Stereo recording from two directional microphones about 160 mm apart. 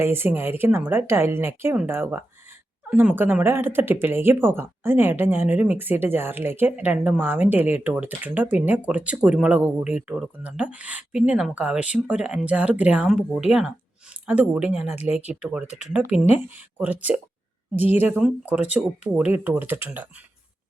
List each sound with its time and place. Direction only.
0.0 s speech: 15° right (ahead or behind)
15.6 s speech: 45° left (ahead or behind)
16.1 s speech: 10° right (ahead or behind)